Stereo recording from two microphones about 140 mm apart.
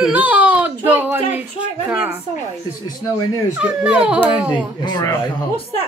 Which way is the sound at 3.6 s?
5° right (ahead or behind).